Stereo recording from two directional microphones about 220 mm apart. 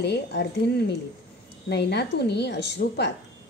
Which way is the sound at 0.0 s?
50° left (ahead or behind).